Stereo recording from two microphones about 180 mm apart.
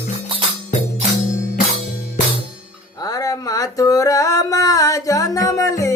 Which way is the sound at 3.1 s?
20° left (ahead or behind).